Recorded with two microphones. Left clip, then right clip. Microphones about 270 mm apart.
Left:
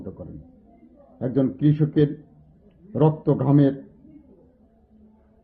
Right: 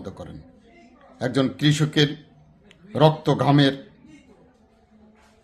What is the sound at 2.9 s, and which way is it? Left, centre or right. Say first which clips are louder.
Speech: right 3 dB; centre.